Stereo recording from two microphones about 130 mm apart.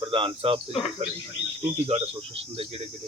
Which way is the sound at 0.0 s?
45° right (ahead or behind).